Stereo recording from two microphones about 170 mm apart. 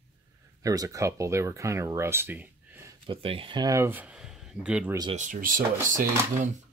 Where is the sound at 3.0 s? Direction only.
35° right (ahead or behind); by 5.0 s 5° right (ahead or behind).